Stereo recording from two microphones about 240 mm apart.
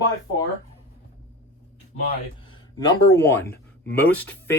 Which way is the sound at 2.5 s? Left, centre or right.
Centre.